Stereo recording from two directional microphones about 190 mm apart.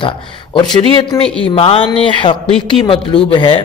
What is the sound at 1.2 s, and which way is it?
Speech, 5° left (ahead or behind).